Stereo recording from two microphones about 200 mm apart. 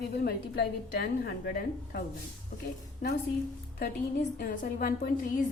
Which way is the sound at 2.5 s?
40° left (ahead or behind).